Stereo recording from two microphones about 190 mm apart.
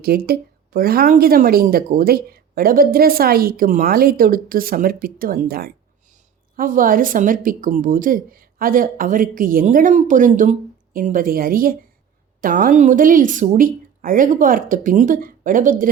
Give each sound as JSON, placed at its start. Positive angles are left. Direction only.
{"t": 0.0, "sound": "a woman's voice", "side_deg": -55}